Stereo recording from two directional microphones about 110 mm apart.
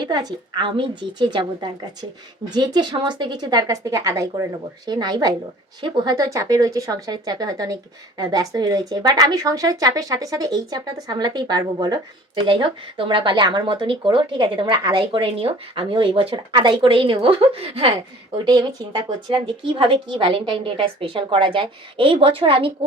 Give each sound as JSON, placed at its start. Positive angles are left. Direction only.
{"t": 0.0, "sound": "speech", "side_deg": -40}
{"t": 18.4, "sound": "speech", "side_deg": -40}